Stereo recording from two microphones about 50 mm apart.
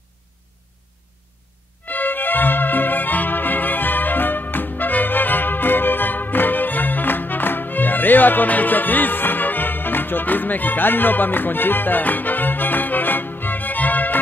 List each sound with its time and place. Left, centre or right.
1.9 s music: left